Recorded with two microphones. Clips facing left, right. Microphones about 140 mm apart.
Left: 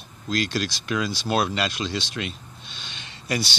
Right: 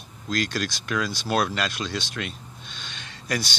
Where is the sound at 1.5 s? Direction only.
5° left (ahead or behind).